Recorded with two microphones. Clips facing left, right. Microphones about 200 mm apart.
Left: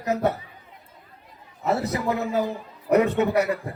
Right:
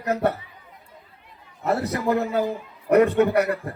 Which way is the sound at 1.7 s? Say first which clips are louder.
Right 1 dB; 60° right (ahead or behind).